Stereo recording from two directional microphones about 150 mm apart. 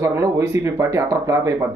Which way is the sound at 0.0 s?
20° right (ahead or behind).